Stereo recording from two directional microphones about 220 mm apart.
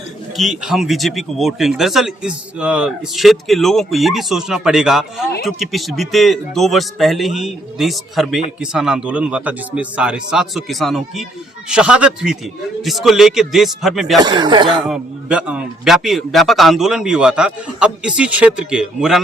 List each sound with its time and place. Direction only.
0.3 s a man's voice: centre (ahead or behind)
14.2 s speech: 20° right (ahead or behind)
14.8 s a man's voice: 5° right (ahead or behind)